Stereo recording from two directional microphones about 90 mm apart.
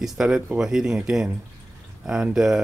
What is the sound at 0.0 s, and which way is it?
Speech, 5° right (ahead or behind).